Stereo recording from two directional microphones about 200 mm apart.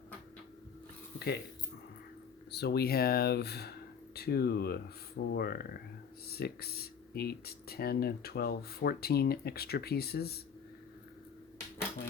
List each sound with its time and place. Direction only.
2.5 s speech: 55° left (ahead or behind)